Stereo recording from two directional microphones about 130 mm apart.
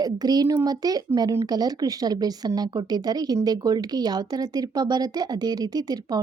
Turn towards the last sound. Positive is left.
turn(degrees=-30)  # may be behind; listen again after turning